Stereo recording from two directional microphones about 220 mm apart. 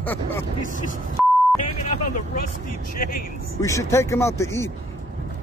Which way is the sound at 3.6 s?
15° left (ahead or behind).